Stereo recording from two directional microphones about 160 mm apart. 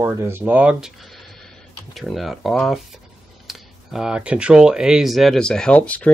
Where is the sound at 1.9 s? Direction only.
Centre (ahead or behind).